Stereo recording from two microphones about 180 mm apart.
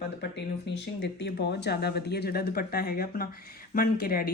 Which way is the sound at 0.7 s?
70° left (ahead or behind).